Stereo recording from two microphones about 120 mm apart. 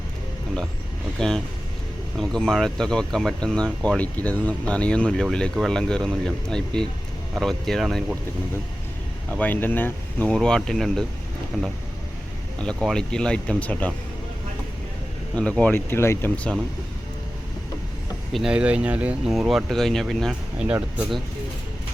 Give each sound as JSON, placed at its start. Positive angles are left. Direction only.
{"t": 1.2, "sound": "speech", "side_deg": 5}
{"t": 9.3, "sound": "speech", "side_deg": 15}
{"t": 12.5, "sound": "speech", "side_deg": 5}
{"t": 15.4, "sound": "speech", "side_deg": 10}
{"t": 18.3, "sound": "speech", "side_deg": -5}
{"t": 20.7, "sound": "speech", "side_deg": -15}